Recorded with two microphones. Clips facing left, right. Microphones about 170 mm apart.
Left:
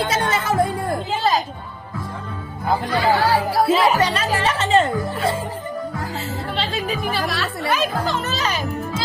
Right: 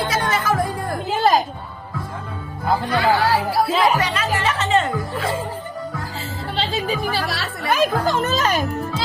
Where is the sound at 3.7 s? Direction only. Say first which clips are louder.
Even; centre (ahead or behind).